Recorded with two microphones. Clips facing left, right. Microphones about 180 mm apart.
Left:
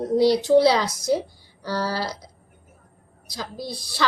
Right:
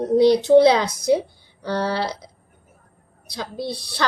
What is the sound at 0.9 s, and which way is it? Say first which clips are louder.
Speech: right 4 dB; 60° right (ahead or behind).